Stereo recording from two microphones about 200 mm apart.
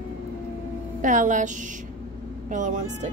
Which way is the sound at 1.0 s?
40° right (ahead or behind).